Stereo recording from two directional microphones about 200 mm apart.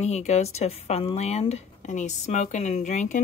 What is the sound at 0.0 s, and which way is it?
Speech, 35° left (ahead or behind).